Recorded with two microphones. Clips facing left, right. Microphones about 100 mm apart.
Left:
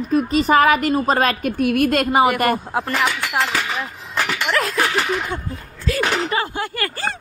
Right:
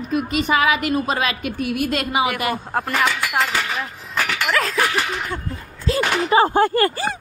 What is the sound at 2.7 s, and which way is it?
Speech, 5° left (ahead or behind).